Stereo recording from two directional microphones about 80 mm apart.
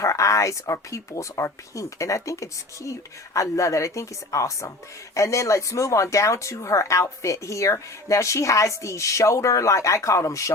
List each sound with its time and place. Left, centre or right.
0.0 s speech: left